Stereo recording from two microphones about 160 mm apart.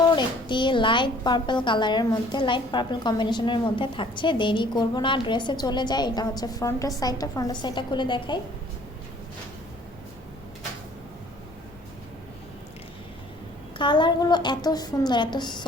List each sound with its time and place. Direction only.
0.0 s a woman's voice: 30° left (ahead or behind)
13.7 s a woman's voice: 30° left (ahead or behind)